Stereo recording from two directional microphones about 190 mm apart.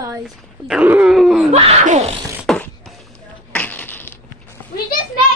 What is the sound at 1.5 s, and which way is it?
Speech, 35° right (ahead or behind).